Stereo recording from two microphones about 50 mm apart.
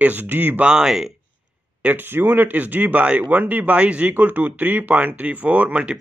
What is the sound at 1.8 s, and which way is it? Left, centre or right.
Speech, right.